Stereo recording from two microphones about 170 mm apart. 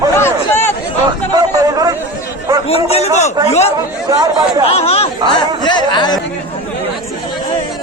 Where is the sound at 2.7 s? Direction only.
35° left (ahead or behind).